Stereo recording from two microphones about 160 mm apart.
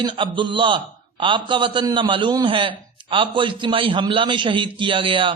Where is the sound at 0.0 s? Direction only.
30° right (ahead or behind).